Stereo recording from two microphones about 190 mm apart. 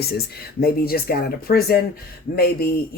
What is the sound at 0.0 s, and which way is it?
Speech, 55° left (ahead or behind).